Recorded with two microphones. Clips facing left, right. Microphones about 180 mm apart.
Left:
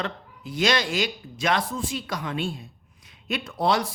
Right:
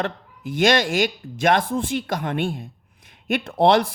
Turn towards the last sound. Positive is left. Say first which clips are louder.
# right 7 dB
turn(degrees=-55)  # may be behind; listen again after turning